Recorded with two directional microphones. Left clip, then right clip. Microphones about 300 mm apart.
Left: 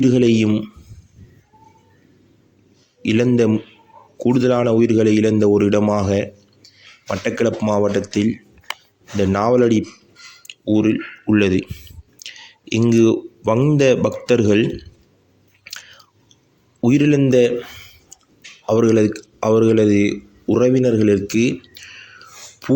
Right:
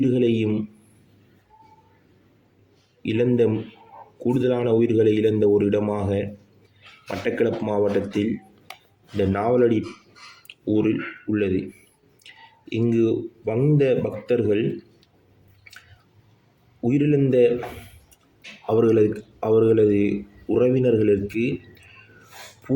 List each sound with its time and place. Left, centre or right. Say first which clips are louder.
0.0 s speech: left 5 dB; left
3.0 s speech: left 4 dB; left
7.3 s speech: left 4 dB; left
12.7 s speech: left 6 dB; left
16.8 s speech: left 5 dB; left
18.6 s speech: left 3 dB; left